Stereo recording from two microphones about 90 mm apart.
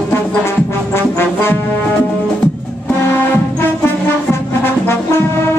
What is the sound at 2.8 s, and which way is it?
Music, 25° left (ahead or behind).